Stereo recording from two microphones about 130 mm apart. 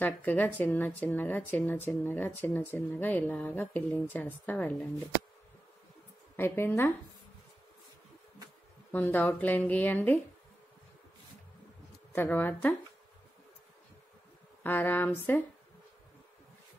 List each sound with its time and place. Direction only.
0.0 s speech: 15° left (ahead or behind)
6.3 s speech: 15° left (ahead or behind)
8.9 s speech: 15° left (ahead or behind)
12.1 s speech: 15° left (ahead or behind)
14.6 s speech: 15° left (ahead or behind)